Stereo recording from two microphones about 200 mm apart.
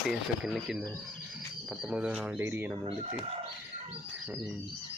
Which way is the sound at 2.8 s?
30° right (ahead or behind).